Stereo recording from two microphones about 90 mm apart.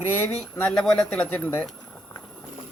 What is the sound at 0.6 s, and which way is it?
Speech, 5° left (ahead or behind).